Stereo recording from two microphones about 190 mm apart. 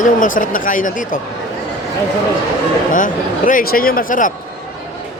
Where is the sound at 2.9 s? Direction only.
45° left (ahead or behind).